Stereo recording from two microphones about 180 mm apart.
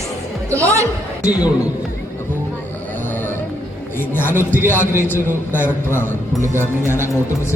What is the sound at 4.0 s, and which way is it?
Speech, 10° left (ahead or behind).